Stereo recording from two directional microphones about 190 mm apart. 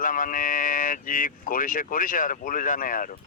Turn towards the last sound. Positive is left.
turn(degrees=45)  # may be behind; listen again after turning